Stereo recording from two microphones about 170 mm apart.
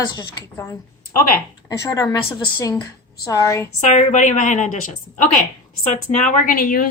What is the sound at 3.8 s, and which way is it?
A woman's voice, 45° left (ahead or behind).